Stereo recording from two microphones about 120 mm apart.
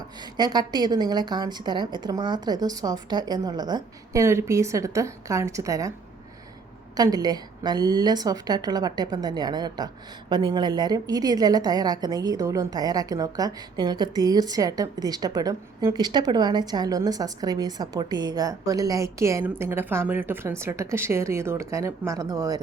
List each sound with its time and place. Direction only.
0.3 s a woman's voice: 35° right (ahead or behind)
4.2 s a woman's voice: 25° right (ahead or behind)
6.9 s a woman's voice: 35° right (ahead or behind)